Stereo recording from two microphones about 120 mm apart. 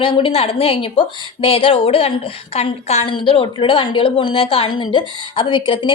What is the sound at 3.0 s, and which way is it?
A woman's voice, 45° left (ahead or behind).